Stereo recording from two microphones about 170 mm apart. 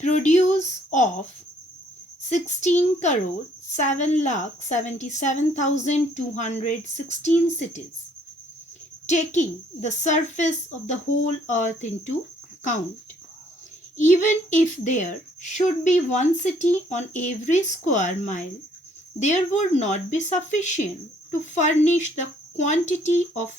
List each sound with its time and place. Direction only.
0.0 s speech: 45° left (ahead or behind)
2.3 s speech: 45° left (ahead or behind)
9.0 s speech: 45° left (ahead or behind)
13.9 s speech: 45° left (ahead or behind)